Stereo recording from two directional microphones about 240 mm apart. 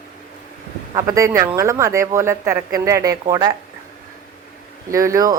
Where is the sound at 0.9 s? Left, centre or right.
Centre.